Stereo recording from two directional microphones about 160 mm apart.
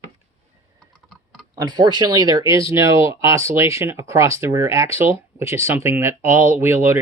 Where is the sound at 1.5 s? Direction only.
25° right (ahead or behind).